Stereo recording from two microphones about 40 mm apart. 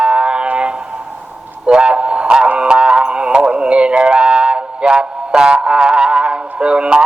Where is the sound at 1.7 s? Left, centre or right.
Right.